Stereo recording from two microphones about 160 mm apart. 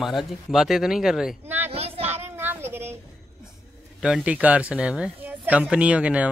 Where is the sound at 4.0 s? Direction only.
5° right (ahead or behind).